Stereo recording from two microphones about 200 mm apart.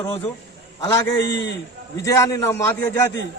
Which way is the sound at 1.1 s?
60° left (ahead or behind).